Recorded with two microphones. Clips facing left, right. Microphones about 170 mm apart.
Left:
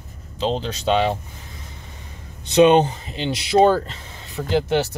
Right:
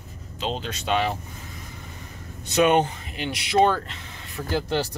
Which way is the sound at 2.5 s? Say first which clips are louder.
Left 6 dB; 25° left (ahead or behind).